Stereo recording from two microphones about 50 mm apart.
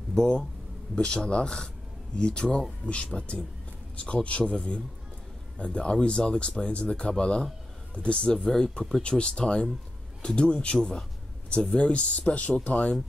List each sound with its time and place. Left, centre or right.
0.1 s speech: centre